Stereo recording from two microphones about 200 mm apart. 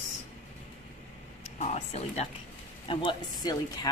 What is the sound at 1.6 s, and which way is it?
Speech, 35° left (ahead or behind).